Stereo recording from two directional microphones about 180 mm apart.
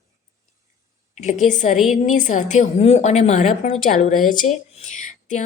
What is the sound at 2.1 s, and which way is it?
A woman's voice, 45° left (ahead or behind).